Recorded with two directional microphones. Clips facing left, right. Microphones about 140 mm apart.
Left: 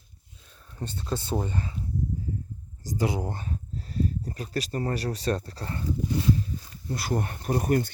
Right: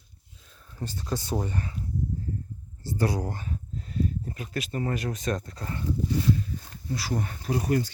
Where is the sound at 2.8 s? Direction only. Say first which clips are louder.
Even; 15° left (ahead or behind).